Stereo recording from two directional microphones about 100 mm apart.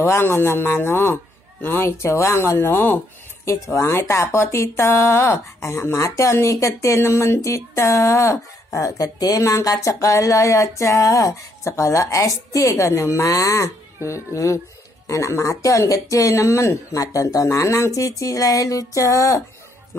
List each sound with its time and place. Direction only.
0.0 s speech: 25° left (ahead or behind)
3.7 s speech: 30° left (ahead or behind)